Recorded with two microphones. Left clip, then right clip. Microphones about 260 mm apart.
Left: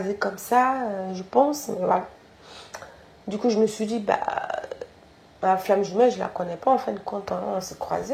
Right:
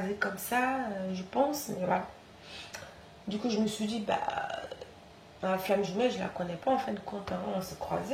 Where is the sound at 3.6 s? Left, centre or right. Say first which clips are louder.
Left 11 dB; left.